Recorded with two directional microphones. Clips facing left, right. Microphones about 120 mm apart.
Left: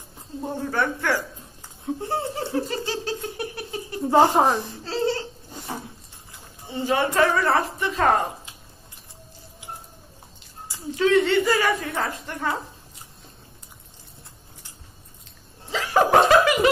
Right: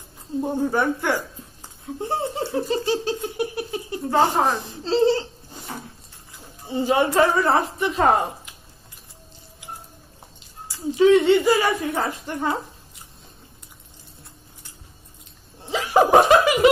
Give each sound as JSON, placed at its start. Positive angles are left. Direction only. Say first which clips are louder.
{"t": 0.4, "sound": "speech", "louder": "right 4 dB", "side_deg": -15}
{"t": 4.1, "sound": "speech", "louder": "left 2 dB", "side_deg": 20}
{"t": 4.6, "sound": "a sound", "louder": "right 6 dB", "side_deg": -25}
{"t": 6.7, "sound": "speech", "louder": "right 3 dB", "side_deg": -20}
{"t": 11.0, "sound": "speech", "louder": "right 4 dB", "side_deg": -20}
{"t": 15.6, "sound": "snicker", "louder": "right 2 dB", "side_deg": -20}